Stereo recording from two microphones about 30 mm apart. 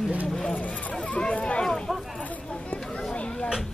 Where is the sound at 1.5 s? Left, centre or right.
Left.